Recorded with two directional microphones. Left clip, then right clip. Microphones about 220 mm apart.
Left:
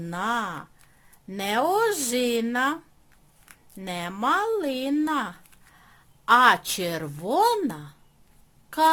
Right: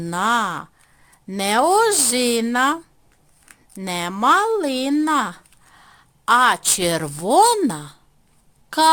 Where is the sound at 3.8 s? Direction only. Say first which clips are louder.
Right 7 dB; 30° right (ahead or behind).